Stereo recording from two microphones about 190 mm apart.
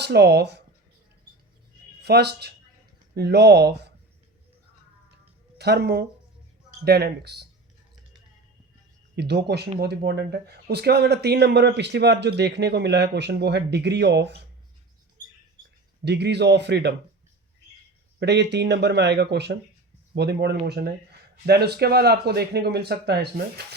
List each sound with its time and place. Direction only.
0.0 s speech: 60° right (ahead or behind)
2.0 s speech: 60° right (ahead or behind)
5.5 s speech: 60° right (ahead or behind)
9.1 s speech: 60° right (ahead or behind)
16.0 s speech: 60° right (ahead or behind)
18.2 s speech: 60° right (ahead or behind)